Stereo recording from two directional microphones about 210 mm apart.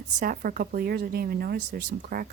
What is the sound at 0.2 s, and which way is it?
Speech, 40° right (ahead or behind).